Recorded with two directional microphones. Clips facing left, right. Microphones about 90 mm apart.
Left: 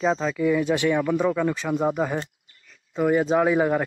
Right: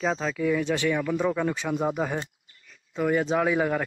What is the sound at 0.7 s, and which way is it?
Speech, 20° left (ahead or behind).